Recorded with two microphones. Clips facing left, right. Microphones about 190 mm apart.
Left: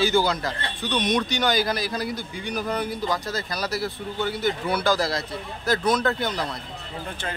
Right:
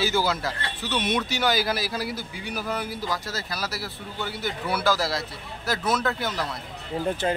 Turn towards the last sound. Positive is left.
turn(degrees=-20)  # may be behind; listen again after turning